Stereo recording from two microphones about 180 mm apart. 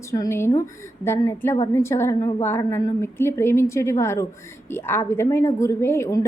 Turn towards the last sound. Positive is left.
turn(degrees=15)  # may be behind; listen again after turning